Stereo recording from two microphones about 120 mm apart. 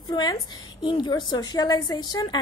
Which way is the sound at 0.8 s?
40° left (ahead or behind).